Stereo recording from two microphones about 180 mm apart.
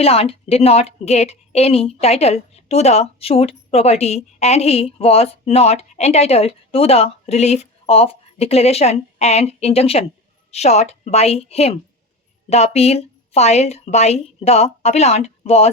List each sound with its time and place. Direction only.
0.0 s a woman's voice: 35° left (ahead or behind)